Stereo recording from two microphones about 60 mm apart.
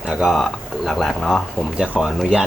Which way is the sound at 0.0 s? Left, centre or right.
Centre.